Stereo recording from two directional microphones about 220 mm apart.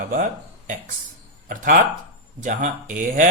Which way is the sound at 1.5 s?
40° right (ahead or behind).